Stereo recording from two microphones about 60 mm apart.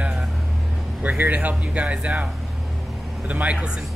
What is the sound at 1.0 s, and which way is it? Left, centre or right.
Speech, right.